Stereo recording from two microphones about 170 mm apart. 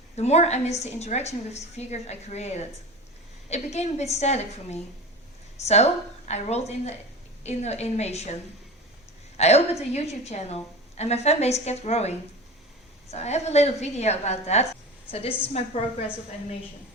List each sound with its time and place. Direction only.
0.2 s a woman's voice: 40° left (ahead or behind)
9.4 s a woman's voice: 40° left (ahead or behind)